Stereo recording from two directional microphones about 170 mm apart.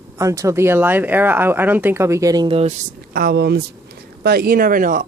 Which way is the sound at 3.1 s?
65° right (ahead or behind).